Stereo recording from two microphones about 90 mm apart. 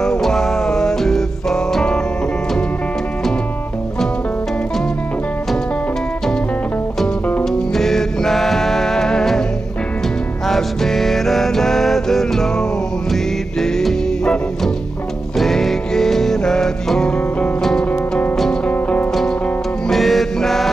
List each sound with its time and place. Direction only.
0.0 s music: 5° left (ahead or behind)
7.4 s music: 5° left (ahead or behind)
10.4 s music: 5° left (ahead or behind)
18.7 s music: 15° left (ahead or behind)
19.9 s music: centre (ahead or behind)